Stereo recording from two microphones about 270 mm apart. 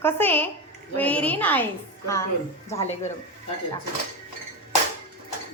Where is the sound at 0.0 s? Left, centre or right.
Centre.